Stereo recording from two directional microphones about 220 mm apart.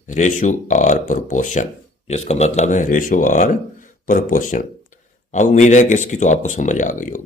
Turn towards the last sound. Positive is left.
turn(degrees=35)  # may be behind; listen again after turning